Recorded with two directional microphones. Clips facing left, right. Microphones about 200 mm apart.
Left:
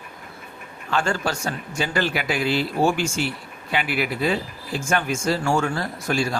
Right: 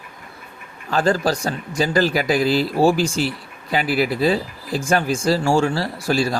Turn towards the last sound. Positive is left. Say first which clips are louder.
# right 4 dB
turn(degrees=-35)  # may be behind; listen again after turning